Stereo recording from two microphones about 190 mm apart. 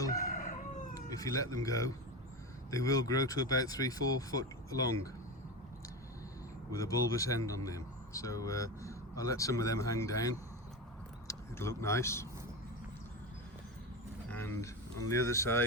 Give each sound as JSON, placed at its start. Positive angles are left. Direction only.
{"t": 0.2, "sound": "crowing", "side_deg": 45}
{"t": 0.9, "sound": "speech", "side_deg": 20}
{"t": 6.7, "sound": "speech", "side_deg": 15}
{"t": 14.3, "sound": "speech", "side_deg": 10}